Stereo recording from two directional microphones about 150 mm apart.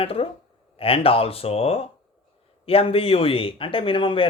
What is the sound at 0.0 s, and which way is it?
Speech, 40° left (ahead or behind).